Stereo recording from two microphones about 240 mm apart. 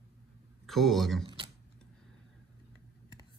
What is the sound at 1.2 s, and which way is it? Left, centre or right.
Keys jangling, right.